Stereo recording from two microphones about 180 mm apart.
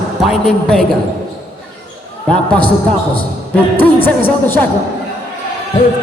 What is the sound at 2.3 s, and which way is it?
Speech, 5° left (ahead or behind).